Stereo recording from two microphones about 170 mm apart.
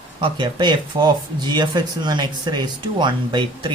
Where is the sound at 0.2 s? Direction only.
25° right (ahead or behind).